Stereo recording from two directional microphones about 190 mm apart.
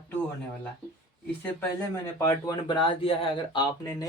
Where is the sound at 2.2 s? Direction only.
25° left (ahead or behind).